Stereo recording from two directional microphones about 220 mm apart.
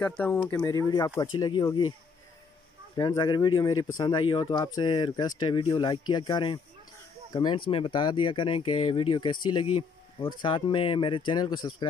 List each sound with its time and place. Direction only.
0.0 s speech: 5° left (ahead or behind)
3.0 s speech: 15° left (ahead or behind)